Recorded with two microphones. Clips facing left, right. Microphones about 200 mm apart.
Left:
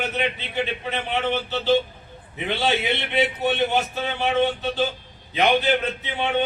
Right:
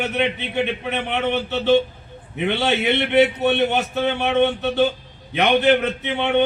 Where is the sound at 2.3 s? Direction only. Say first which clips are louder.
Right 3 dB; 65° right (ahead or behind).